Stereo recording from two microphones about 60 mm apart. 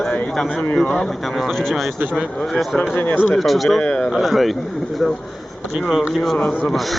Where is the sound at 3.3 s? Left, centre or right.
Centre.